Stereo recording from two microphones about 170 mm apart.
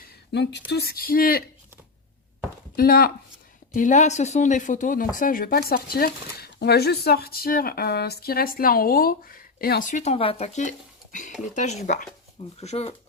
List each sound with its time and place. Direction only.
0.3 s speech: 85° left
0.7 s speech: 65° left (ahead or behind)
2.7 s speech: 60° left (ahead or behind)
3.8 s speech: 45° left (ahead or behind)